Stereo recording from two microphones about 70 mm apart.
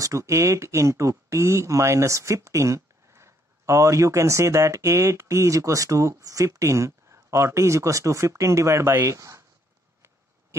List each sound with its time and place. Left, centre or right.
0.0 s speech: right